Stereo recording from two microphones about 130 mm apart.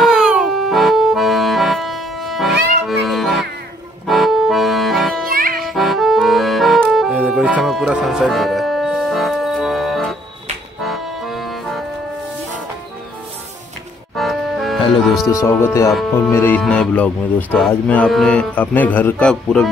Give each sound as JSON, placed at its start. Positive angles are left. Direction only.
{"t": 0.0, "sound": "accordion", "side_deg": -5}
{"t": 5.6, "sound": "music", "side_deg": 0}
{"t": 7.2, "sound": "music", "side_deg": -10}
{"t": 10.8, "sound": "accordion", "side_deg": 0}
{"t": 14.1, "sound": "music", "side_deg": 0}
{"t": 15.2, "sound": "speech", "side_deg": 25}
{"t": 16.6, "sound": "speech", "side_deg": 5}